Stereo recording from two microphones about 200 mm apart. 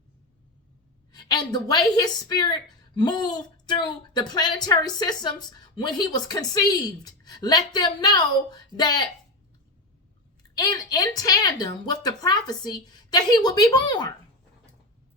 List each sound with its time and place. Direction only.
1.1 s speech: 20° left (ahead or behind)
10.6 s speech: 20° left (ahead or behind)